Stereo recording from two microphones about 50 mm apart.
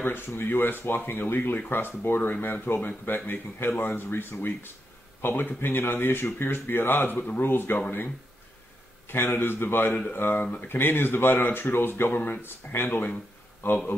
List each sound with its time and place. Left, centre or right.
0.4 s speech: left
9.0 s speech: left
10.4 s speech: left
10.7 s speech: left